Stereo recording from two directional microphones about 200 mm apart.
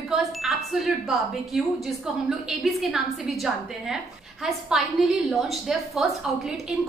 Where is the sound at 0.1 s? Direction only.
Centre (ahead or behind).